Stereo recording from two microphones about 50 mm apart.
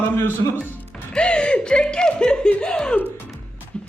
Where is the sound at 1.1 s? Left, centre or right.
Left.